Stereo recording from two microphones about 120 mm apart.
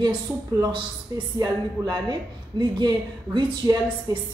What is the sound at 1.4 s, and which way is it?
Speech, 40° right (ahead or behind).